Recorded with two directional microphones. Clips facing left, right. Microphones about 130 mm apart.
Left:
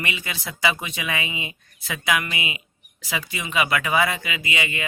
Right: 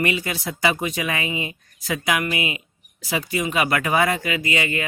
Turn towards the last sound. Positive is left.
turn(degrees=-45)  # may be behind; listen again after turning